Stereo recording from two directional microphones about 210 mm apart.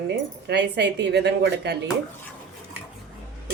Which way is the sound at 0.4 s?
55° right (ahead or behind).